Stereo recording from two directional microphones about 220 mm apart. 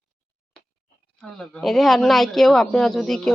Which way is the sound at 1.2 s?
Centre (ahead or behind).